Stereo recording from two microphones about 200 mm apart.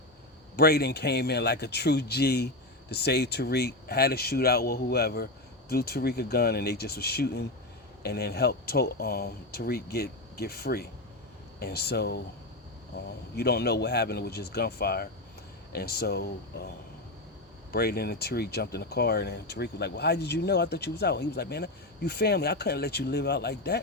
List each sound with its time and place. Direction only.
0.5 s speech: 50° left (ahead or behind)
13.3 s speech: 55° left (ahead or behind)